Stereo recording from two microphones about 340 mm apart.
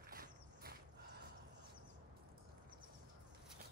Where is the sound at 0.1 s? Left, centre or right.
Right.